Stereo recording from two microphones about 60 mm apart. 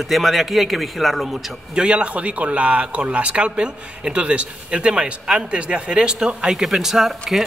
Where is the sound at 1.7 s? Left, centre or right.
Centre.